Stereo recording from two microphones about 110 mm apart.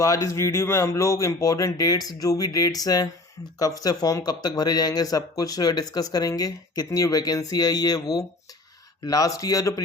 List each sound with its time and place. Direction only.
0.0 s speech: 30° left (ahead or behind)